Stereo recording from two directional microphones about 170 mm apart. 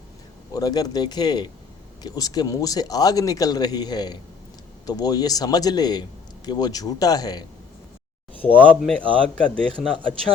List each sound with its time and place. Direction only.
0.5 s a man's voice: 20° left (ahead or behind)
8.5 s a man's voice: 5° left (ahead or behind)